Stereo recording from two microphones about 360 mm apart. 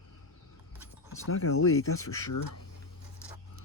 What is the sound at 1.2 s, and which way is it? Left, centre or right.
Speech, left.